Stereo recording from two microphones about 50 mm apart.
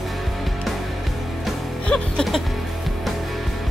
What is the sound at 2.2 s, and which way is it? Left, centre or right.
Music, centre.